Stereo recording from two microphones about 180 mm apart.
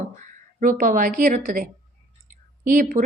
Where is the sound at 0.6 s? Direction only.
50° right (ahead or behind).